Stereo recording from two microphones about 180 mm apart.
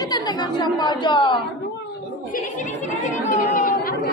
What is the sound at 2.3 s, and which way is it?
Speech, 45° left (ahead or behind).